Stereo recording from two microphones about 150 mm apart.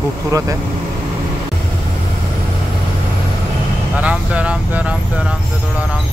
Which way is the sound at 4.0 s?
10° right (ahead or behind).